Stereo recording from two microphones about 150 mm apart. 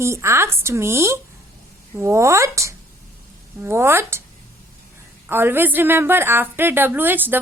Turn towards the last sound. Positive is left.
turn(degrees=-10)  # may be behind; listen again after turning